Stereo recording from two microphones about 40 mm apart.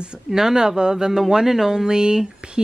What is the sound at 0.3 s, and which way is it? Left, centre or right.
Speech, centre.